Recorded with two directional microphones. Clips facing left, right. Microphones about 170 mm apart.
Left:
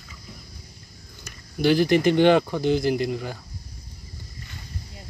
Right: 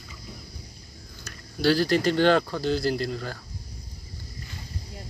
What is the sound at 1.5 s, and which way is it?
Speech, 15° left (ahead or behind).